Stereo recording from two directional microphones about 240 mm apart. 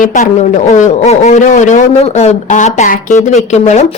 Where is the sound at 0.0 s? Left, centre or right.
Left.